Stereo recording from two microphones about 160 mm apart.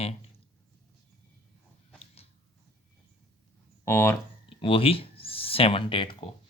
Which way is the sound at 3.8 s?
15° left (ahead or behind).